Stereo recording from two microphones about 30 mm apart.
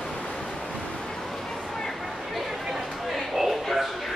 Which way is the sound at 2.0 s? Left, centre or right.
Centre.